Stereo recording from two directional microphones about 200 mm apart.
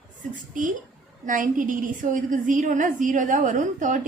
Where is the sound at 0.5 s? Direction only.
40° right (ahead or behind).